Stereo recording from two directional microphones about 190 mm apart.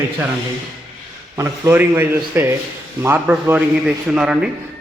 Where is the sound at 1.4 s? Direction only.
10° right (ahead or behind).